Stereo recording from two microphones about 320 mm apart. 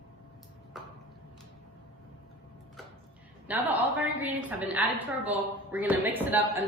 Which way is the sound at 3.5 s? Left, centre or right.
Centre.